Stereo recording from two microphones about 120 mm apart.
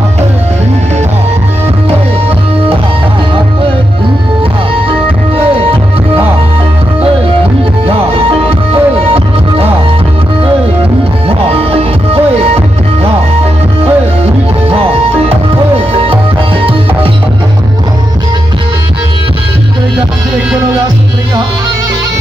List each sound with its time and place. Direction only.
7.8 s music: 50° right (ahead or behind)
11.2 s music: 55° right (ahead or behind)